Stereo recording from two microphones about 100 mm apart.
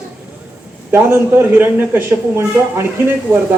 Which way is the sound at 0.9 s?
20° right (ahead or behind).